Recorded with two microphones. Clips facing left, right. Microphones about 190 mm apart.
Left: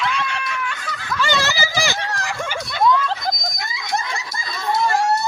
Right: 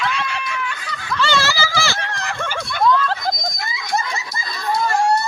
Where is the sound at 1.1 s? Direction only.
15° left (ahead or behind).